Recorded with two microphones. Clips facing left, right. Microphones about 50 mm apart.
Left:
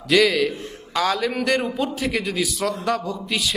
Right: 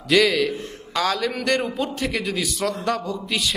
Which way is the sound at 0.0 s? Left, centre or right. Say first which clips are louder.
Left 1 dB; centre.